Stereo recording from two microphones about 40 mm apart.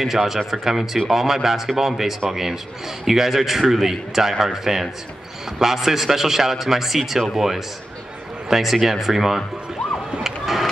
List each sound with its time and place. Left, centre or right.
0.0 s a man's voice: centre
10.2 s emergency vehicle: centre